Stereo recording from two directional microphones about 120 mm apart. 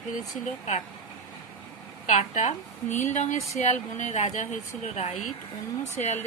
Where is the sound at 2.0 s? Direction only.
70° left (ahead or behind).